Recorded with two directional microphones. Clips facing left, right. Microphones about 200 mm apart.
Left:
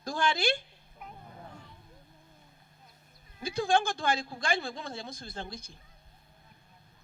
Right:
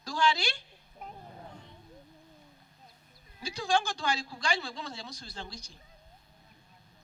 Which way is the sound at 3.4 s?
55° left (ahead or behind).